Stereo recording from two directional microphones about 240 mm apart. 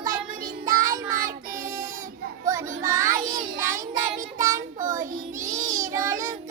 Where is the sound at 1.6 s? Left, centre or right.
Right.